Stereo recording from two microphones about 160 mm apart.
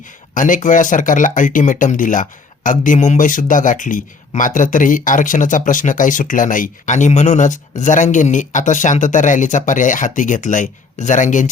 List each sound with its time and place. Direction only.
0.3 s speech: 55° left (ahead or behind)